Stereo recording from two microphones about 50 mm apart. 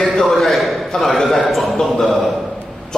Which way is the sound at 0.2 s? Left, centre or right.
Centre.